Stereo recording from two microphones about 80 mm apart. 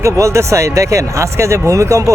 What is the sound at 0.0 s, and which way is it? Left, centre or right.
Speech, right.